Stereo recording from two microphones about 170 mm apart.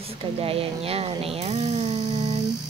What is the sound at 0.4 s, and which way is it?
Speech, 35° right (ahead or behind).